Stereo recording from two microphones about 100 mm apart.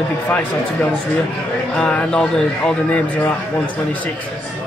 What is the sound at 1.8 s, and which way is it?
Speech, 10° left (ahead or behind).